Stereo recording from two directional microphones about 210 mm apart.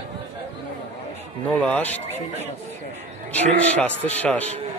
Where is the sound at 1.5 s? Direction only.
5° left (ahead or behind).